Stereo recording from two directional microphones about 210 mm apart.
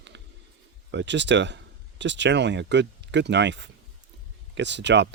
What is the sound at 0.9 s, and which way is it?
Speech, 60° right (ahead or behind).